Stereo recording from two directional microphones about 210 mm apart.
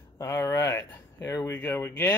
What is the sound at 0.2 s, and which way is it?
Speech, 15° left (ahead or behind).